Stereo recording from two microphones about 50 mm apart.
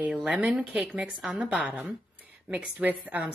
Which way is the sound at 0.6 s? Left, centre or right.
Right.